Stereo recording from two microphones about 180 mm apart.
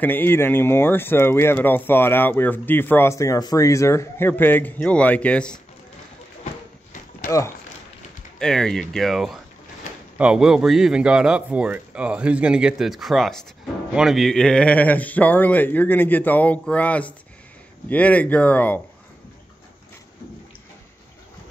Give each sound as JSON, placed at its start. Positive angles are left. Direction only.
{"t": 0.0, "sound": "speech", "side_deg": 10}
{"t": 7.2, "sound": "speech", "side_deg": 15}
{"t": 8.4, "sound": "speech", "side_deg": 5}